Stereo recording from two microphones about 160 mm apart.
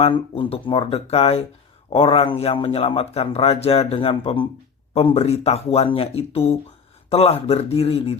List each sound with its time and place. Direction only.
0.0 s speech: 30° left (ahead or behind)